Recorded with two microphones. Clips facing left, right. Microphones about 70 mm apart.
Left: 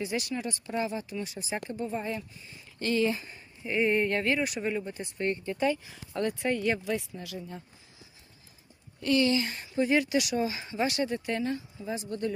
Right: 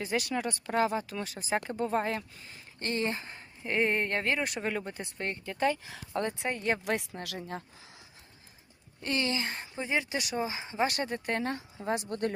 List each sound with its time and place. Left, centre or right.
0.3 s speech: right
1.8 s speech: right
2.8 s speech: right
4.7 s speech: right
6.4 s speech: right
6.8 s speech: right
9.0 s speech: right
10.8 s speech: right